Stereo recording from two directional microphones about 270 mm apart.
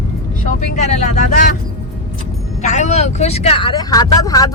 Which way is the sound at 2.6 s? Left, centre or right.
Left.